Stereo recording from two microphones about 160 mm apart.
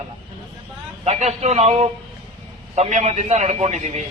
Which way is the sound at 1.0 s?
45° right (ahead or behind).